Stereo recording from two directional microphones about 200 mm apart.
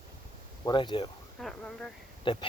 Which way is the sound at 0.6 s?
20° left (ahead or behind).